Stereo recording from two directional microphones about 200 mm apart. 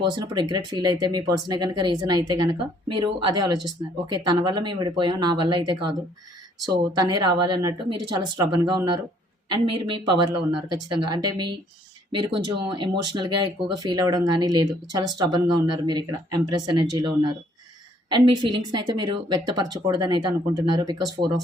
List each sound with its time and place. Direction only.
0.0 s speech: 20° right (ahead or behind)